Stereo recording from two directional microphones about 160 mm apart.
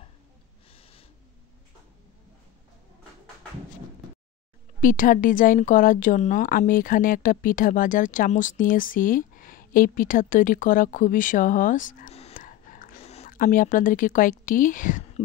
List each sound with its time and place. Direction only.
4.7 s speech: 60° left (ahead or behind)
12.1 s whispering: 40° left (ahead or behind)
12.4 s whispering: 55° left (ahead or behind)
13.0 s a sound: 40° left (ahead or behind)
13.3 s speech: 60° left (ahead or behind)